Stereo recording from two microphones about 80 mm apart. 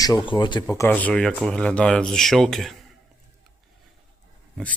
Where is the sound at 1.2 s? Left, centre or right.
Centre.